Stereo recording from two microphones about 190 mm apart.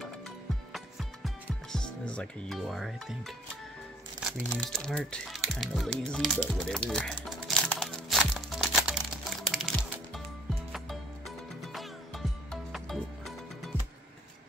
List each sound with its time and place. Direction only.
0.7 s music: centre (ahead or behind)
4.4 s music: 5° left (ahead or behind)